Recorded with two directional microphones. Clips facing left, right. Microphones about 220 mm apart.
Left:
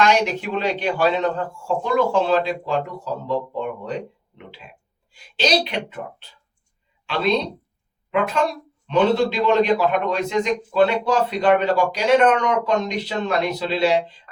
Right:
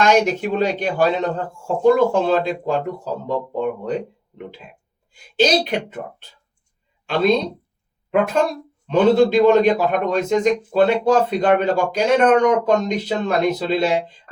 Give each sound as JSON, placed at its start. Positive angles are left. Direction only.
{"t": 0.0, "sound": "a man's voice", "side_deg": -45}
{"t": 5.1, "sound": "a man's voice", "side_deg": -50}
{"t": 8.9, "sound": "a man's voice", "side_deg": -50}